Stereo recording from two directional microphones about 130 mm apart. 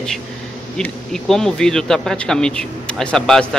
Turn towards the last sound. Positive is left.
turn(degrees=5)  # may be behind; listen again after turning